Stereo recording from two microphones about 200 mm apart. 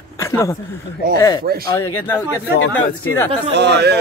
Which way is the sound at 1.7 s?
15° left (ahead or behind).